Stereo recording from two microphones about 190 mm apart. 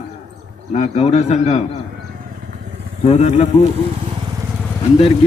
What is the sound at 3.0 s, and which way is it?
Speech, 35° left (ahead or behind).